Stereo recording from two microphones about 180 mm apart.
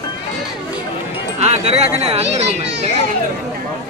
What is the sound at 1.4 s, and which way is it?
Speech, 35° right (ahead or behind).